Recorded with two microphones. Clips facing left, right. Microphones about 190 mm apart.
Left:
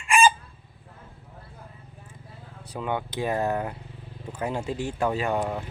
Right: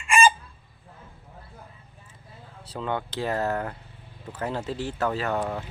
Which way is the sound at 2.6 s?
15° left (ahead or behind).